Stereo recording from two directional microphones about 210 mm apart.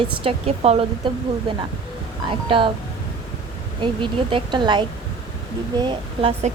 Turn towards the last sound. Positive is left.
turn(degrees=-25)  # may be behind; listen again after turning